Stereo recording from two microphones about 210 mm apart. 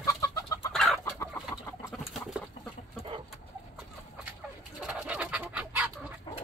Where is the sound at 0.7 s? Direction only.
Centre (ahead or behind).